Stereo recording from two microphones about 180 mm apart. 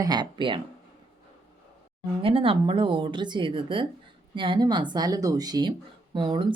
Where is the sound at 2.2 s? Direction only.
30° right (ahead or behind).